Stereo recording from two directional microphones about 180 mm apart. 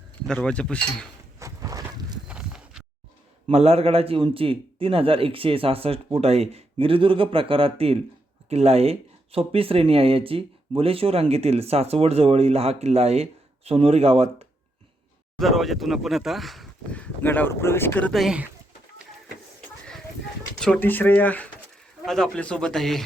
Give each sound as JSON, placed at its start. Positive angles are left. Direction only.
{"t": 0.3, "sound": "speech", "side_deg": 5}
{"t": 1.4, "sound": "a sound", "side_deg": -15}
{"t": 2.2, "sound": "horse", "side_deg": -5}
{"t": 3.5, "sound": "speech", "side_deg": -35}
{"t": 15.4, "sound": "speech", "side_deg": 0}
{"t": 20.6, "sound": "speech", "side_deg": 10}